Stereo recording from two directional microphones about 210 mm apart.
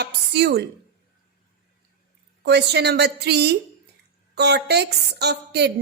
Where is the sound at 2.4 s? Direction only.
50° right (ahead or behind).